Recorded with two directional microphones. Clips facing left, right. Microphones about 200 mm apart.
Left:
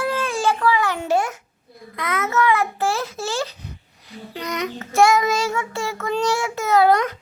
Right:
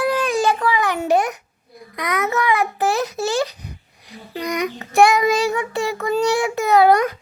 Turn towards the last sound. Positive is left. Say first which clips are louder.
# right 2 dB
turn(degrees=-10)  # may be behind; listen again after turning